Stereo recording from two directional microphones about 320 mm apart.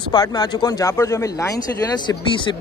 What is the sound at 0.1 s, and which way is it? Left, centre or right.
Speech, centre.